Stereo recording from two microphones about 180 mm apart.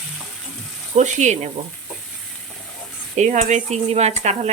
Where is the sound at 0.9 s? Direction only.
40° right (ahead or behind).